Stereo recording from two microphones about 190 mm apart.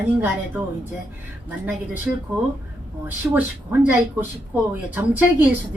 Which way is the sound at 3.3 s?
10° right (ahead or behind).